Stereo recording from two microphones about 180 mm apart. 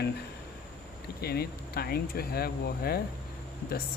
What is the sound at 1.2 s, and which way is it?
Speech, 60° left (ahead or behind).